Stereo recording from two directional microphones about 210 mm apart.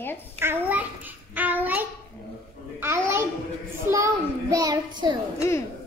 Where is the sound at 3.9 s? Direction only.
15° right (ahead or behind).